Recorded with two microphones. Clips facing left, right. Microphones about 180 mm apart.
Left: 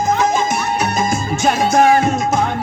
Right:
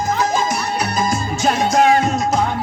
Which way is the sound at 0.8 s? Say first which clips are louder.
Left 2 dB; 25° left (ahead or behind).